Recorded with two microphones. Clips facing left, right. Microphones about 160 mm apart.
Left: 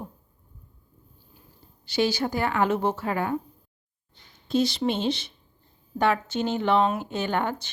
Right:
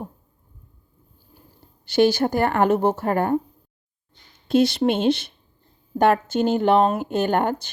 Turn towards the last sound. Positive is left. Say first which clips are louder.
# right 6 dB
turn(degrees=-50)  # may be behind; listen again after turning